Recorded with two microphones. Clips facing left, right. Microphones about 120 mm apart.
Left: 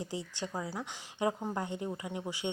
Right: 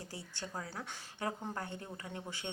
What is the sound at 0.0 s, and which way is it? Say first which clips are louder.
Speech: left 8 dB; 15° left (ahead or behind).